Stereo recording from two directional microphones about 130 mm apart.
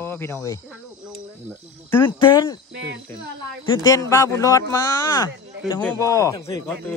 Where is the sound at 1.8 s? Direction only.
15° left (ahead or behind).